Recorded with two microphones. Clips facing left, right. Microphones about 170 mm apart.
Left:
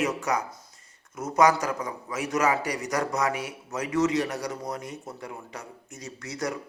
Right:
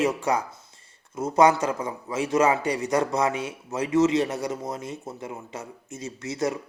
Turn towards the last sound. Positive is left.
turn(degrees=-25)  # may be behind; listen again after turning